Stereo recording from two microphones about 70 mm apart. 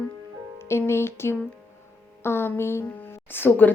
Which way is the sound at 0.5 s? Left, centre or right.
Left.